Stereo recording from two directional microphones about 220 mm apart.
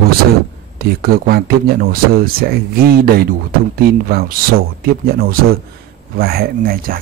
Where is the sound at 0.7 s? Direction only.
45° right (ahead or behind).